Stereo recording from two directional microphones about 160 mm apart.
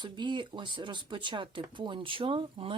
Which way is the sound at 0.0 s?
30° right (ahead or behind).